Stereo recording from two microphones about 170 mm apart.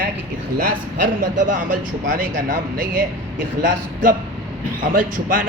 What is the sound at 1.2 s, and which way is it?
Speech, 50° right (ahead or behind).